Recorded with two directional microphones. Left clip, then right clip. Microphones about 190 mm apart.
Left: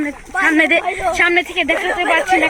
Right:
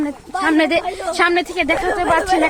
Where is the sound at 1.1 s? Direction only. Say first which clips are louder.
Even; 30° right (ahead or behind).